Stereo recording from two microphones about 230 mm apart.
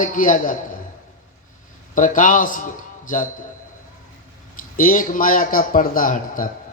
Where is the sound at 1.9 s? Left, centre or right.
Left.